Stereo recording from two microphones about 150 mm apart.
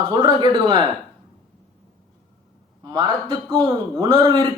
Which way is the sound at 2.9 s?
30° right (ahead or behind).